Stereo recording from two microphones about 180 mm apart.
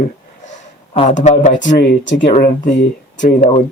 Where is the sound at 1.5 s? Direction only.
75° left (ahead or behind).